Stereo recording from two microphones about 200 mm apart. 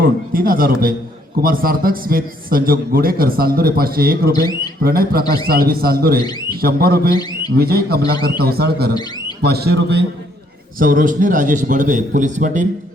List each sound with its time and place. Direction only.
0.0 s a man's voice: 45° right (ahead or behind)
10.8 s a man's voice: 45° right (ahead or behind)